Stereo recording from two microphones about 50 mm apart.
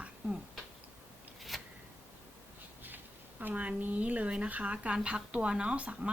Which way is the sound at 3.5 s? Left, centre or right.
Right.